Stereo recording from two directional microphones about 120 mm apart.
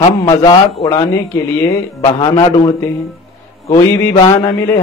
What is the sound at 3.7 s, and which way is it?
Mantra, 30° left (ahead or behind).